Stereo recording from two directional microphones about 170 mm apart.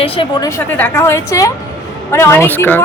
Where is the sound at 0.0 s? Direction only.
30° left (ahead or behind).